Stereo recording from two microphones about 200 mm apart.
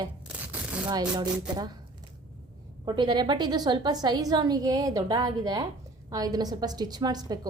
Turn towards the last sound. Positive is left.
turn(degrees=-20)  # may be behind; listen again after turning